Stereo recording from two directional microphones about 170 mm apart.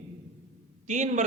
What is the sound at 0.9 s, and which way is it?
Speech, 45° right (ahead or behind).